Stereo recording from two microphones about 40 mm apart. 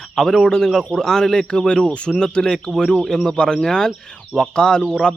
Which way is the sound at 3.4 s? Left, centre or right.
Left.